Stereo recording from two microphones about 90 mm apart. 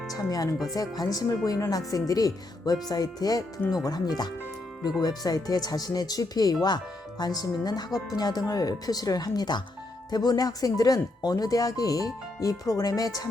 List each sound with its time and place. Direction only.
0.1 s speech: 40° left (ahead or behind)